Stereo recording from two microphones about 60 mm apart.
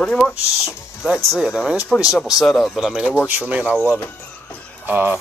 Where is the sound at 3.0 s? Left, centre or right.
Centre.